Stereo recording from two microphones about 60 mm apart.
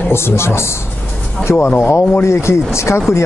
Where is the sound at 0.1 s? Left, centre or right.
Left.